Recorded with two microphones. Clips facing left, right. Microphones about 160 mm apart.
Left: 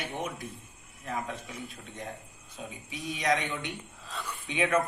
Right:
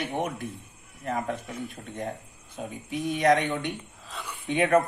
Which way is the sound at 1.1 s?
50° right (ahead or behind).